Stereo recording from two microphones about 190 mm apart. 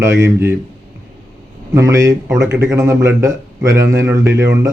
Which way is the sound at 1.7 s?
15° right (ahead or behind).